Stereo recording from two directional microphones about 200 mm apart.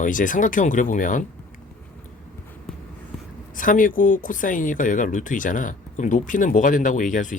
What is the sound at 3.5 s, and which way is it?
Speech, 40° left (ahead or behind).